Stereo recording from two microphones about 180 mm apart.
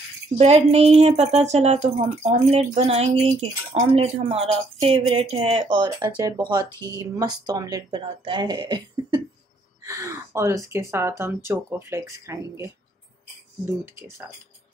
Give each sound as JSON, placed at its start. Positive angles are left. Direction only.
{"t": 0.4, "sound": "a woman's voice", "side_deg": -35}
{"t": 13.7, "sound": "speech", "side_deg": -15}